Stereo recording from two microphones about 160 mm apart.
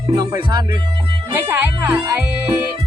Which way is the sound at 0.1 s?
25° right (ahead or behind).